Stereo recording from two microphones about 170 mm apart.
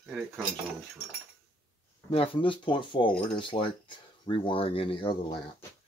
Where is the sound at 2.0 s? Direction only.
35° left (ahead or behind).